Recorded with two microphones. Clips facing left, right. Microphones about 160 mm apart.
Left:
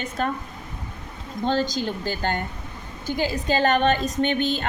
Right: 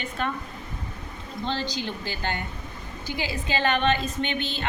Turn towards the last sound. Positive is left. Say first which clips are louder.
# left 6 dB
turn(degrees=45)  # may be behind; listen again after turning